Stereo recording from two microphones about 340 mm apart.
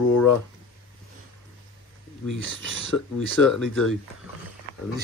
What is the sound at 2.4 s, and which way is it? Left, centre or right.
Speech, right.